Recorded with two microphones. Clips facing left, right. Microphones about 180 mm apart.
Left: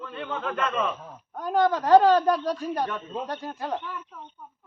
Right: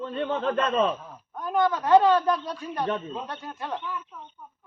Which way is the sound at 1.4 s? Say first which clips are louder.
Left 2 dB; 40° left (ahead or behind).